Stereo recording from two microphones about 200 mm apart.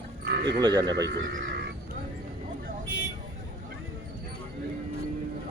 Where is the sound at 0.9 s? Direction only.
60° right (ahead or behind).